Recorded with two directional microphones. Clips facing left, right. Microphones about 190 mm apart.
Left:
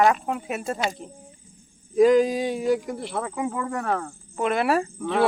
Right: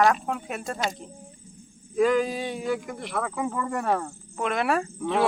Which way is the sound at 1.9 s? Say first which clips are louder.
Left 5 dB; 40° left (ahead or behind).